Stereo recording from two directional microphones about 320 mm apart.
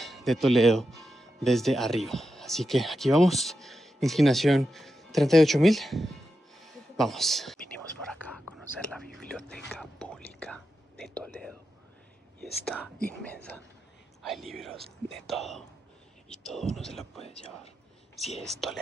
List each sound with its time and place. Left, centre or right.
0.0 s speech: centre
8.2 s whispering: centre
12.4 s speech: centre
17.2 s speech: centre
18.1 s speech: centre